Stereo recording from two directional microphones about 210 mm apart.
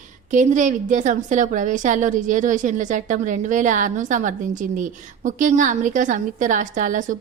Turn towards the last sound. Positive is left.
turn(degrees=-35)  # may be behind; listen again after turning